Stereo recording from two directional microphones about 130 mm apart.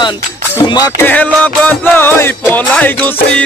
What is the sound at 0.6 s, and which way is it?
Music, 20° left (ahead or behind).